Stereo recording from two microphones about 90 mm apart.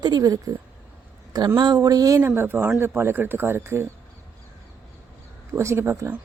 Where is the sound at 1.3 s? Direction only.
55° right (ahead or behind).